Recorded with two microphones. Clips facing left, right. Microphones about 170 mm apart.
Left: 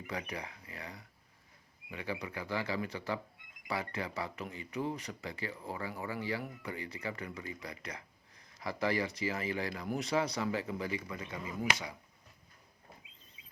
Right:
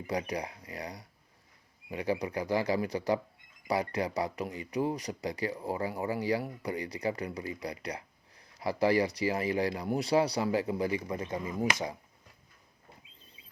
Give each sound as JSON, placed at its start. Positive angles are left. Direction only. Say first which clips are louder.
{"t": 0.1, "sound": "speech", "louder": "right 8 dB", "side_deg": -35}